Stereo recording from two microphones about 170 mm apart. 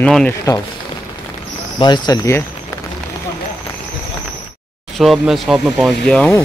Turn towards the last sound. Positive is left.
turn(degrees=5)  # may be behind; listen again after turning